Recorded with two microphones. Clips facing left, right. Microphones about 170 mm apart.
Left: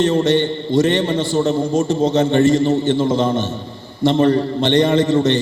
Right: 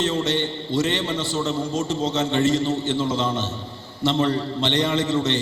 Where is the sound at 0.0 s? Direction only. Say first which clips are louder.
Left 8 dB; 55° left (ahead or behind).